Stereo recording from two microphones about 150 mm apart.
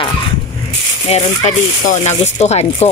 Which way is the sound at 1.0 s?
40° left (ahead or behind).